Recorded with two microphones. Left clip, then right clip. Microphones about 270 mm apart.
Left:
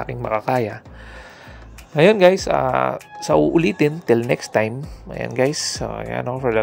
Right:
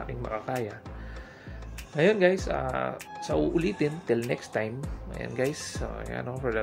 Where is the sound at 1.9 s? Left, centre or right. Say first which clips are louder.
Left 10 dB; left.